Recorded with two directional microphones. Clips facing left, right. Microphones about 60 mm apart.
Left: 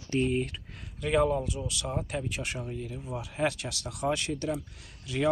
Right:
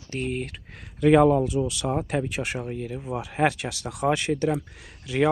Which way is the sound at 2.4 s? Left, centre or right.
Right.